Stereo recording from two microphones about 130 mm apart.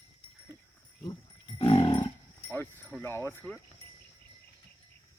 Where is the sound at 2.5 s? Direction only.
15° left (ahead or behind).